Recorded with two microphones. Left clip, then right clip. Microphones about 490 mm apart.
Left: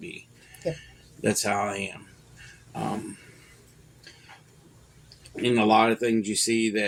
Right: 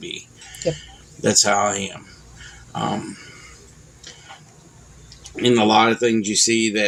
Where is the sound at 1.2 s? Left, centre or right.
Left.